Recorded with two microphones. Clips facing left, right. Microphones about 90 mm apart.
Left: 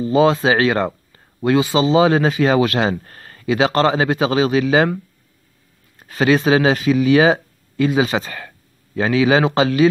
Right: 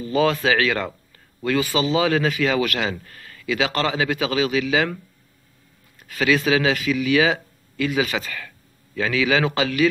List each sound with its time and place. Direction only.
0.0 s speech: 25° left (ahead or behind)
5.9 s speech: 35° left (ahead or behind)